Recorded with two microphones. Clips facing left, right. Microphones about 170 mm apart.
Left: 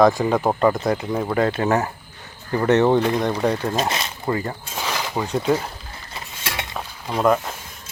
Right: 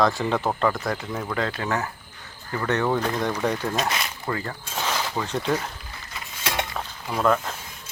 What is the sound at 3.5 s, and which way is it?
Speech, 30° left (ahead or behind).